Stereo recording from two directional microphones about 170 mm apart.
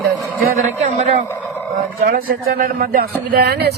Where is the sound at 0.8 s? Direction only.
40° right (ahead or behind).